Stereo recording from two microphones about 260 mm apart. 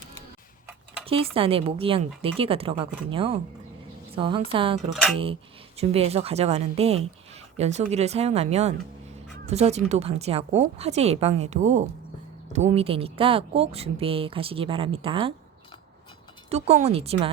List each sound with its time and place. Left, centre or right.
1.0 s speech: right
16.5 s speech: right